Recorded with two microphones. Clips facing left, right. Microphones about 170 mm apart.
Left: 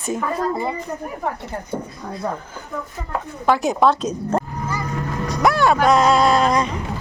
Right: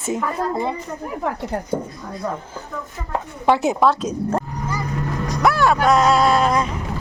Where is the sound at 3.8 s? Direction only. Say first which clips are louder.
Left 1 dB; 5° right (ahead or behind).